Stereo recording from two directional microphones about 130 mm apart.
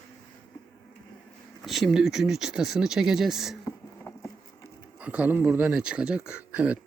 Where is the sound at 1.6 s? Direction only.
Centre (ahead or behind).